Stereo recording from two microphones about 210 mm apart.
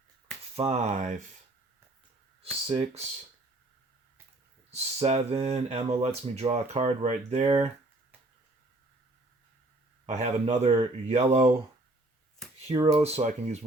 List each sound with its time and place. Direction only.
0.5 s speech: 30° right (ahead or behind)
2.4 s speech: 30° right (ahead or behind)
4.7 s speech: 30° right (ahead or behind)
10.1 s speech: 30° right (ahead or behind)
12.6 s speech: 25° right (ahead or behind)